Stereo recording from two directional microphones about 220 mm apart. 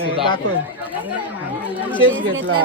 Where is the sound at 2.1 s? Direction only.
60° right (ahead or behind).